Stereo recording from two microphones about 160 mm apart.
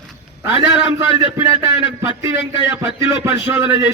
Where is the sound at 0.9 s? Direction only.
15° right (ahead or behind).